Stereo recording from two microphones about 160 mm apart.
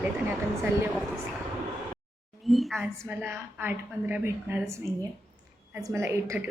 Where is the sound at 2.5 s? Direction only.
Centre (ahead or behind).